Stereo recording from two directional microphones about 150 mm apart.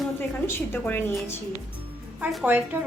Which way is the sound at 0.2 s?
15° left (ahead or behind).